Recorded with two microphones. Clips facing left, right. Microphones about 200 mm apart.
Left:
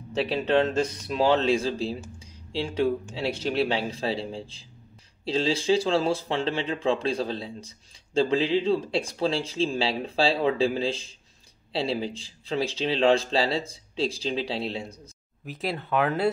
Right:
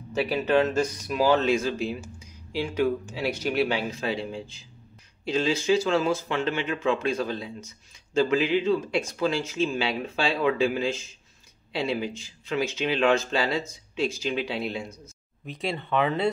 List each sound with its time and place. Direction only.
0.1 s speech: 30° left (ahead or behind)
2.1 s a sound: 30° left (ahead or behind)
3.2 s speech: 30° left (ahead or behind)
15.4 s speech: 5° left (ahead or behind)